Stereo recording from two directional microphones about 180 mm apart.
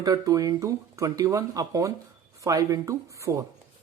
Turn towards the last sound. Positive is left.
turn(degrees=-15)  # may be behind; listen again after turning